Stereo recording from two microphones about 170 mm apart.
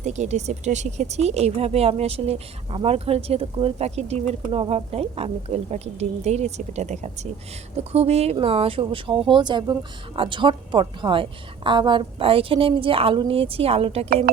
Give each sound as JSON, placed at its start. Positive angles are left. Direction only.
{"t": 0.0, "sound": "speech", "side_deg": -45}